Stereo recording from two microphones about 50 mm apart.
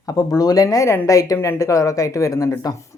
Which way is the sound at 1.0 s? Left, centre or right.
Left.